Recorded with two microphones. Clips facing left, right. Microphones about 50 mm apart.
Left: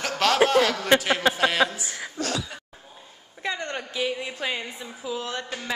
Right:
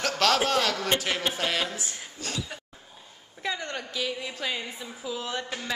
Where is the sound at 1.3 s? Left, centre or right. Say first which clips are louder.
Left 6 dB; centre.